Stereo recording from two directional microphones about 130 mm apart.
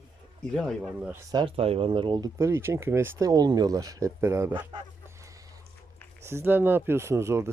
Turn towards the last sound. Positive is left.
turn(degrees=-20)  # may be behind; listen again after turning